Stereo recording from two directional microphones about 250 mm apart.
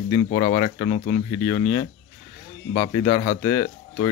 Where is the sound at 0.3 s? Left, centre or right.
Left.